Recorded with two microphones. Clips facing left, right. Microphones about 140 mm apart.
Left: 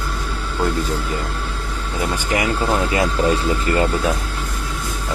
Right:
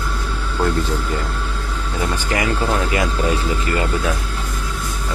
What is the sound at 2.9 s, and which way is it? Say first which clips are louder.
Speech: left 2 dB; 25° left (ahead or behind).